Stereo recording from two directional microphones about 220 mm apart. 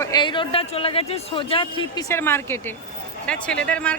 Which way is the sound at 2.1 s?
10° left (ahead or behind).